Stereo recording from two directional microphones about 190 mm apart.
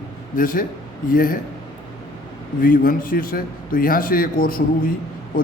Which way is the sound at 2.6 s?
50° left (ahead or behind).